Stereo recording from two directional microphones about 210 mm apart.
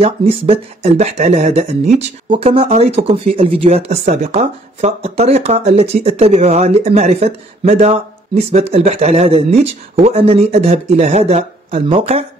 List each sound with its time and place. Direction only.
0.0 s speech: 30° right (ahead or behind)